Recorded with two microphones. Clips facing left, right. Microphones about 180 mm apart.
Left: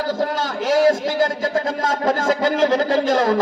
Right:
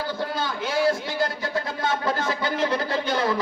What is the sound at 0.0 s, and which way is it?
A man's voice, 45° left (ahead or behind).